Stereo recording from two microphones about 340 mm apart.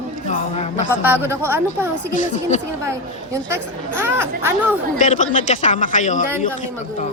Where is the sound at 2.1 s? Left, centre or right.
Left.